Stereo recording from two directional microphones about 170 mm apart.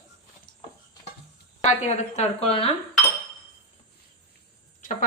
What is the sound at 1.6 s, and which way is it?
A woman's voice, 45° left (ahead or behind).